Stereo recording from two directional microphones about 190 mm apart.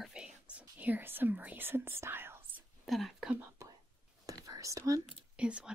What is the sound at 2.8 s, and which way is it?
Whispering, centre (ahead or behind).